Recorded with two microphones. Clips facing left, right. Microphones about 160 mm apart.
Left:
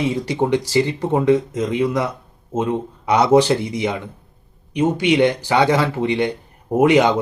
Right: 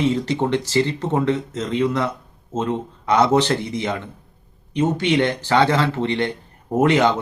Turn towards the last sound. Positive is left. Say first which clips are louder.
# left 3 dB
turn(degrees=15)  # may be behind; listen again after turning